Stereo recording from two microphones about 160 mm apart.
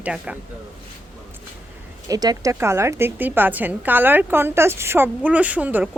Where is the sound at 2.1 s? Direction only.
25° right (ahead or behind).